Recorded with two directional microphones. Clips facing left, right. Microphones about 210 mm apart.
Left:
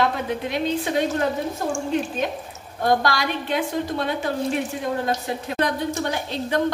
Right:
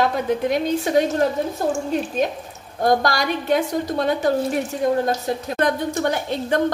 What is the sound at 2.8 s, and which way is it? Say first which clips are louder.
A woman's voice: right 2 dB; 45° right (ahead or behind).